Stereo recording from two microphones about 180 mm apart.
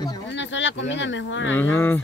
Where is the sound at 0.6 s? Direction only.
90° left.